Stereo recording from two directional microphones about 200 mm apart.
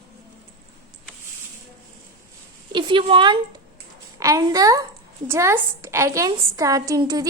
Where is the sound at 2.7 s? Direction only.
25° right (ahead or behind).